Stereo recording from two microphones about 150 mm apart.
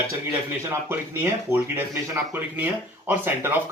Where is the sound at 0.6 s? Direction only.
15° right (ahead or behind).